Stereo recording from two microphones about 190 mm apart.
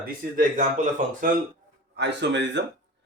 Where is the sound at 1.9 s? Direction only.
65° right (ahead or behind).